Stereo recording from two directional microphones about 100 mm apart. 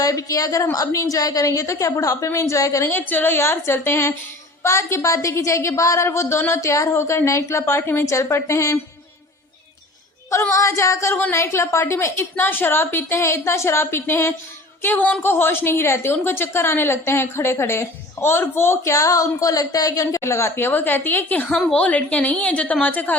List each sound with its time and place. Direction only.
0.0 s a woman's voice: 35° left (ahead or behind)
2.9 s a woman's voice: 20° left (ahead or behind)
10.5 s a woman's voice: 30° left (ahead or behind)